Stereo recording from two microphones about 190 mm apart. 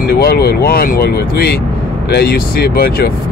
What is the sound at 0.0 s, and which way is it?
Speech, 55° left (ahead or behind).